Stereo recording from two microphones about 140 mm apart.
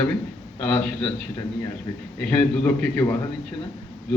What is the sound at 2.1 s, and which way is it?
A man's voice, 10° left (ahead or behind).